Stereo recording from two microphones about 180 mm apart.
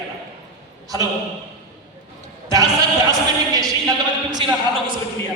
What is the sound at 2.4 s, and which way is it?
Bleat, 20° right (ahead or behind).